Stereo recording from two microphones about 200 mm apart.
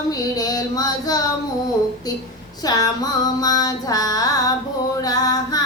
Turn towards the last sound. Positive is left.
turn(degrees=20)  # may be behind; listen again after turning